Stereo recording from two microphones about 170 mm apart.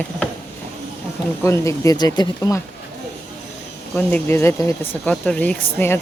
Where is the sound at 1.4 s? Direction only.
15° left (ahead or behind).